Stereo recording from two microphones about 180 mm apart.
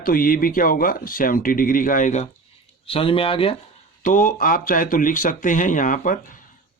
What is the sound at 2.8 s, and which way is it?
Speech, 30° left (ahead or behind).